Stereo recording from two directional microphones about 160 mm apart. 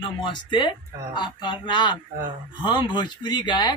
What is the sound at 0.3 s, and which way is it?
Speech, 30° left (ahead or behind).